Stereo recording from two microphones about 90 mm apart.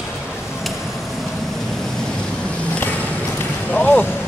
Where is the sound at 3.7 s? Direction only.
20° left (ahead or behind).